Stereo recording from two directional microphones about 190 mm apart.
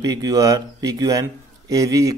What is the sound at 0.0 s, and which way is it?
A man's voice, 20° right (ahead or behind).